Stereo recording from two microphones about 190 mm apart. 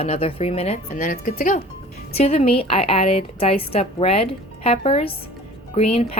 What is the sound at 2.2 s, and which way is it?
Speech, 30° left (ahead or behind).